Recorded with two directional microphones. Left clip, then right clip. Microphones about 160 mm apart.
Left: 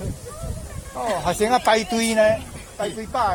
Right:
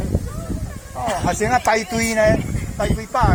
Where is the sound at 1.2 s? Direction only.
55° left (ahead or behind); by 2.3 s 35° left (ahead or behind).